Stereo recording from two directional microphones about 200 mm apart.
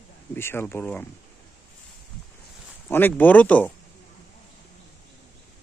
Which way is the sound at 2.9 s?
10° left (ahead or behind).